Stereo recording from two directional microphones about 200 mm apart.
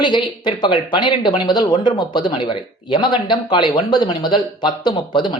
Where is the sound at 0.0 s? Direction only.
25° left (ahead or behind).